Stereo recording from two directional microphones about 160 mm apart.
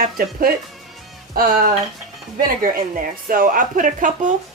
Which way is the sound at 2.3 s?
60° right (ahead or behind).